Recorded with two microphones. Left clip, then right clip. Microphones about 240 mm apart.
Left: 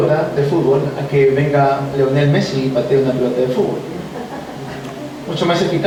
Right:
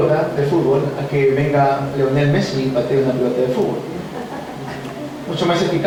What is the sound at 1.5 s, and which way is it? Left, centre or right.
Speech, centre.